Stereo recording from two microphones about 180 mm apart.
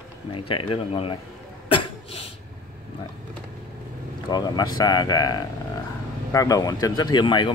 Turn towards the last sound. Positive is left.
turn(degrees=25)  # may be behind; listen again after turning